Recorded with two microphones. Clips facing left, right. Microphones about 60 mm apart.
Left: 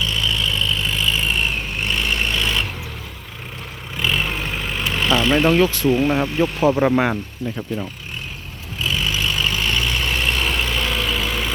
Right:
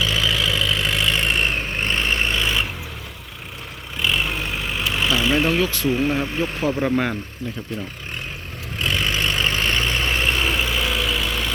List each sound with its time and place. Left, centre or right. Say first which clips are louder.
0.0 s vehicle: right 1 dB; right
1.7 s vehicle: even; right; by 2.6 s centre
3.9 s vehicle: left 1 dB; centre
5.5 s speech: left 4 dB; left
8.8 s vehicle: even; right; by 11.5 s centre